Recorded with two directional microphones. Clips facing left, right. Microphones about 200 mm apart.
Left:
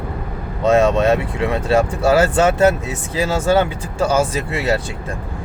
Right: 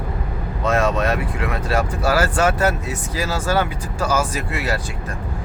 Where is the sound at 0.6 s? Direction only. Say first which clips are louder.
Left 6 dB; 25° left (ahead or behind).